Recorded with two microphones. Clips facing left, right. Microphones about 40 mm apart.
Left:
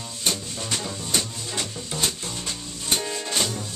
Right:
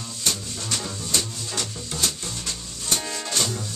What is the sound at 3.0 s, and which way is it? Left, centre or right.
Music, centre.